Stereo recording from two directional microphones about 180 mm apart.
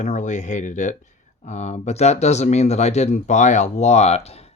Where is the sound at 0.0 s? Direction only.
40° left (ahead or behind).